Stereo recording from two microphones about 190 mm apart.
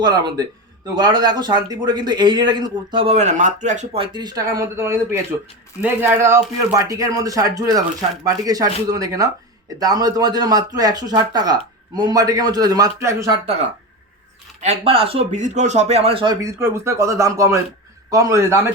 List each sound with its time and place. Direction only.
0.0 s a man's voice: 20° right (ahead or behind)
14.6 s a man's voice: 35° right (ahead or behind); by 18.6 s 15° right (ahead or behind)